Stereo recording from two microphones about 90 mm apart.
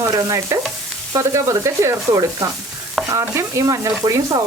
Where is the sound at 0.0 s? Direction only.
40° right (ahead or behind).